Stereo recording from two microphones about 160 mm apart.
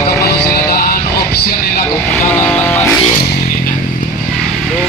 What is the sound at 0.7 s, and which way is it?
Vehicle, 65° left (ahead or behind).